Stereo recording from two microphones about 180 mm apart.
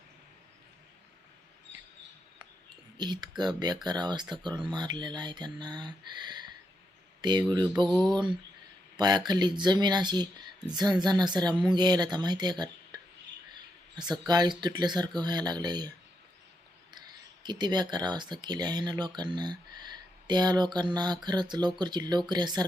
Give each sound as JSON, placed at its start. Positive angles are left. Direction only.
{"t": 3.0, "sound": "speech", "side_deg": -25}
{"t": 9.0, "sound": "speech", "side_deg": -25}
{"t": 17.4, "sound": "speech", "side_deg": -25}